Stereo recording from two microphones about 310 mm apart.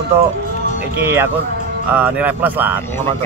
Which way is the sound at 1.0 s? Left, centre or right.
Centre.